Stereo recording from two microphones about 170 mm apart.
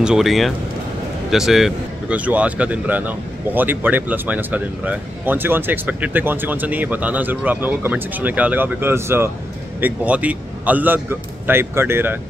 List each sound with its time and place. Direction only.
0.0 s speech: 5° right (ahead or behind)